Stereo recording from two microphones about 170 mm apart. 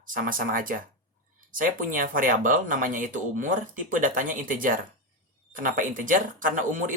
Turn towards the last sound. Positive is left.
turn(degrees=-50)  # may be behind; listen again after turning